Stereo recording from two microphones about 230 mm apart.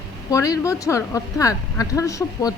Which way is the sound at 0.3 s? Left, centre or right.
Centre.